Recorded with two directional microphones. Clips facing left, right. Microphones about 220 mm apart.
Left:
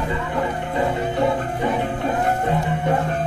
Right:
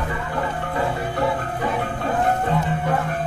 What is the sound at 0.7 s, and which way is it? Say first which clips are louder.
Music: left 3 dB; 20° left (ahead or behind).